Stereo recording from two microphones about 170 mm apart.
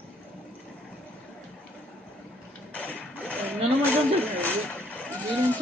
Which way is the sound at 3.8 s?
10° left (ahead or behind).